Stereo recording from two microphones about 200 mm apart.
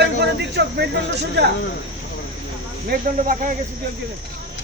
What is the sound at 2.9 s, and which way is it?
Speech, 45° right (ahead or behind).